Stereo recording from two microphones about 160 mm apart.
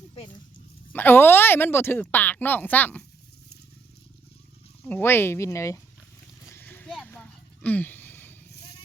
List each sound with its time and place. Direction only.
0.1 s dog: 30° left (ahead or behind)
0.9 s speech: 15° left (ahead or behind)
4.8 s speech: 10° left (ahead or behind)
6.5 s boat: 10° left (ahead or behind)
7.1 s a sound: 10° left (ahead or behind)